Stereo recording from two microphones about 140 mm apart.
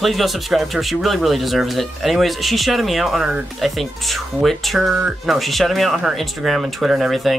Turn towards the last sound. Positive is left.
turn(degrees=0)  # may be behind; listen again after turning